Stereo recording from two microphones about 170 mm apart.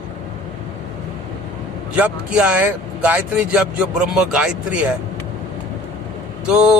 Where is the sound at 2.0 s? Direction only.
10° right (ahead or behind).